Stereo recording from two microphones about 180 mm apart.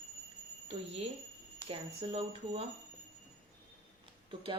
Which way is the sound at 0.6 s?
35° right (ahead or behind).